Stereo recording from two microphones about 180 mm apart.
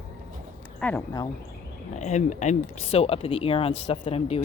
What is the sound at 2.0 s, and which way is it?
Speech, 40° left (ahead or behind).